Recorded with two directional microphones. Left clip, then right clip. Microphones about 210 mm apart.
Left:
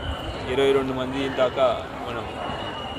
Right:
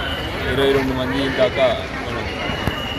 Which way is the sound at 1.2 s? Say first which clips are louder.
Right 4 dB; 25° left (ahead or behind).